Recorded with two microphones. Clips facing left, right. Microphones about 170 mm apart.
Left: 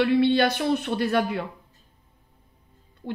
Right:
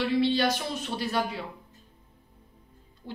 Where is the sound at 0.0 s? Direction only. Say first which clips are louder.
Left 5 dB; 60° left (ahead or behind).